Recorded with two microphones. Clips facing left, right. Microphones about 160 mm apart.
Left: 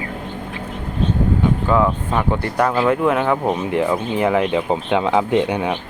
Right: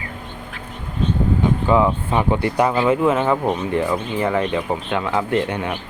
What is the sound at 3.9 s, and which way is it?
Speech, 10° left (ahead or behind).